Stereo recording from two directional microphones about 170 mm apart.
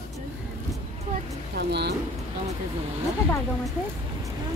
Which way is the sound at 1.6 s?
75° right (ahead or behind).